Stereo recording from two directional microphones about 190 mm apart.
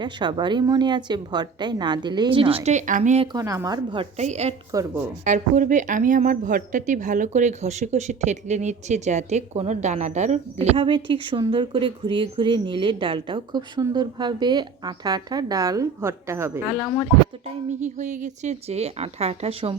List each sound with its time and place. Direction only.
0.0 s a woman's voice: 25° right (ahead or behind)
2.6 s a woman's voice: 40° right (ahead or behind)
3.3 s speech: 15° right (ahead or behind)
3.9 s a woman's voice: 35° right (ahead or behind)
4.7 s speech: 20° right (ahead or behind)
5.2 s a woman's voice: 40° right (ahead or behind); by 16.5 s 15° right (ahead or behind)
17.8 s a woman's voice: 40° right (ahead or behind)